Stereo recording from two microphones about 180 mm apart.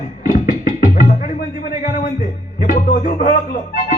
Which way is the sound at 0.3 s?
45° left (ahead or behind).